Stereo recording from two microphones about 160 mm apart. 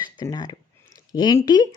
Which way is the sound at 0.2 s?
25° left (ahead or behind).